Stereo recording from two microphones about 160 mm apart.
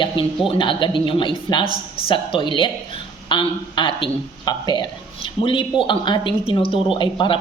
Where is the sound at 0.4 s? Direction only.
30° left (ahead or behind).